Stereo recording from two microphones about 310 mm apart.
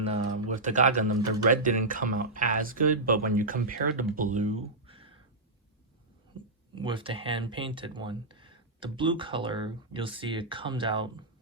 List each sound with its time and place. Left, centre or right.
0.0 s speech: right
6.3 s a sound: centre
6.7 s speech: centre